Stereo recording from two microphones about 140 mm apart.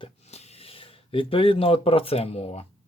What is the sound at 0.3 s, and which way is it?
Speech, 45° left (ahead or behind).